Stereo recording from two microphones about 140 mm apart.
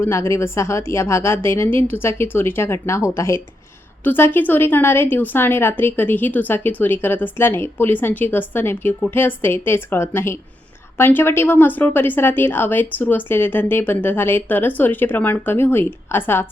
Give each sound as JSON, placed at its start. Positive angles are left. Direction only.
{"t": 0.0, "sound": "a woman's voice", "side_deg": 20}